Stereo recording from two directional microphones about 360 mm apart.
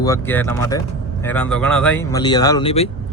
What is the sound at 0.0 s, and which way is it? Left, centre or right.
Speech, centre.